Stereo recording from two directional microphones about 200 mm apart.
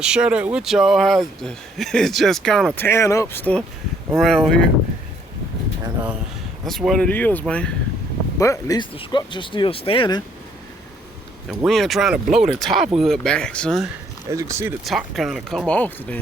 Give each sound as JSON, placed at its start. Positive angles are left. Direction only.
{"t": 0.0, "sound": "speech", "side_deg": -5}
{"t": 2.8, "sound": "speech", "side_deg": 15}
{"t": 6.7, "sound": "speech", "side_deg": 0}
{"t": 8.4, "sound": "speech", "side_deg": 15}
{"t": 11.4, "sound": "speech", "side_deg": 0}
{"t": 14.3, "sound": "speech", "side_deg": -15}
{"t": 14.8, "sound": "speech", "side_deg": 0}